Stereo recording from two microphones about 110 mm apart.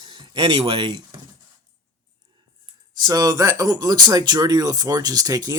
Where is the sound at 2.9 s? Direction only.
40° right (ahead or behind).